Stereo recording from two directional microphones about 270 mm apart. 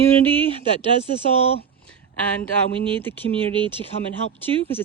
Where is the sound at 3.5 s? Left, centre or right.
Centre.